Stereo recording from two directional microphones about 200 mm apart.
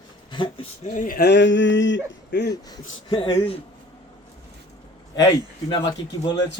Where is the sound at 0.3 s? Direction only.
25° left (ahead or behind).